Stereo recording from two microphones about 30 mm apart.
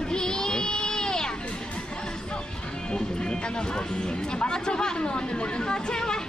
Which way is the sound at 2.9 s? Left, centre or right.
Left.